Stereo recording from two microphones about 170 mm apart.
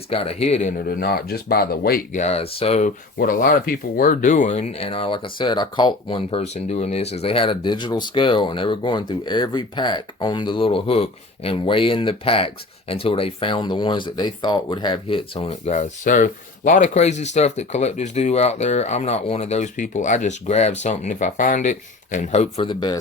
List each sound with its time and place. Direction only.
0.1 s speech: 35° left (ahead or behind)
0.9 s speech: 65° left (ahead or behind)
2.1 s speech: 40° left (ahead or behind)
3.2 s speech: 55° left (ahead or behind); by 23.0 s 30° left (ahead or behind)